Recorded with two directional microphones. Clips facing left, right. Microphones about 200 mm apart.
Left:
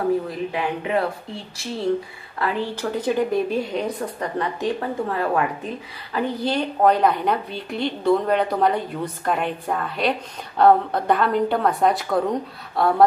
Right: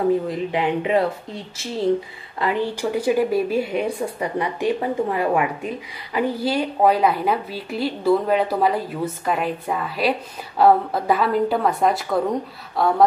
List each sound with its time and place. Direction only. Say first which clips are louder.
0.3 s speech: right 3 dB; 20° right (ahead or behind)
2.3 s a woman's voice: right 2 dB; 15° right (ahead or behind); by 13.0 s centre (ahead or behind)